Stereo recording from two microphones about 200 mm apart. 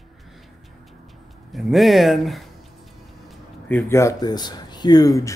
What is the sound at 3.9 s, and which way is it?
Speech, 15° left (ahead or behind).